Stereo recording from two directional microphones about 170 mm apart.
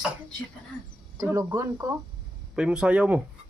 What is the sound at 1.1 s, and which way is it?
Speech, 20° right (ahead or behind).